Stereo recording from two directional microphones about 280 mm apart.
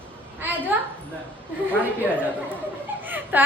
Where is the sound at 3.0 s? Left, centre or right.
Centre.